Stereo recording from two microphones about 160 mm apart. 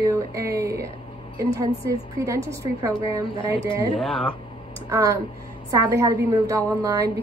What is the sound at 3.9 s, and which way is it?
Speech, 5° left (ahead or behind).